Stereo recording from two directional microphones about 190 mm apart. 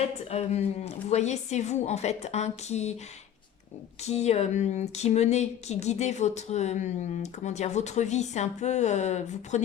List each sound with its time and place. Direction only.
0.3 s speech: 35° left (ahead or behind)
4.0 s speech: 35° left (ahead or behind)